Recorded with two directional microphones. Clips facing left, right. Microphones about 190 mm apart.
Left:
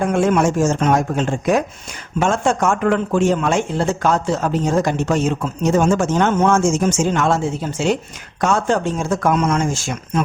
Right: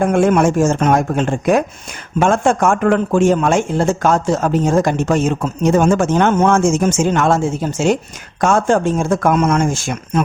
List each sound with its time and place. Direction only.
0.0 s a man's voice: 50° right (ahead or behind)